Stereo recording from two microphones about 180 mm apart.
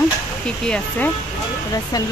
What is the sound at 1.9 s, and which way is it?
Speech, 20° left (ahead or behind).